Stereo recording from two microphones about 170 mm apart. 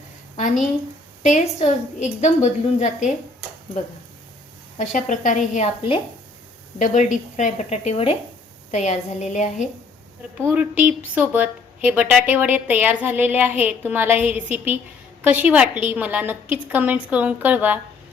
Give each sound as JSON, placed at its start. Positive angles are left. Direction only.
{"t": 0.3, "sound": "a woman's voice", "side_deg": 45}
{"t": 4.8, "sound": "a woman's voice", "side_deg": 45}
{"t": 6.7, "sound": "a woman's voice", "side_deg": 45}
{"t": 10.3, "sound": "a woman's voice", "side_deg": -10}